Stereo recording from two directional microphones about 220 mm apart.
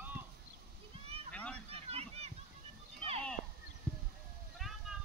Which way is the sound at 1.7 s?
30° right (ahead or behind).